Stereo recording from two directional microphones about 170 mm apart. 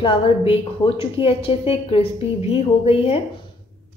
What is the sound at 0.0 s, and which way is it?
Speech, 35° left (ahead or behind).